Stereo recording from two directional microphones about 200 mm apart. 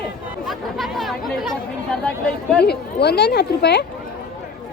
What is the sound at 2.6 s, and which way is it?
Speech, 55° left (ahead or behind).